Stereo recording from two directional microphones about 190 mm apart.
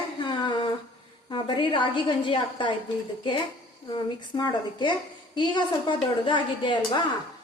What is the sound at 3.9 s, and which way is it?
A woman's voice, 25° left (ahead or behind).